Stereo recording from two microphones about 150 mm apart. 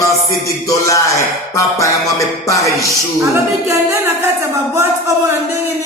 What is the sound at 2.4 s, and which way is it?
Music, 20° left (ahead or behind).